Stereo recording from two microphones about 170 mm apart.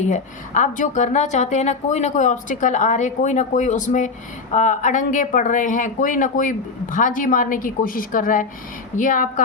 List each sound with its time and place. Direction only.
0.0 s a woman's voice: 45° left (ahead or behind)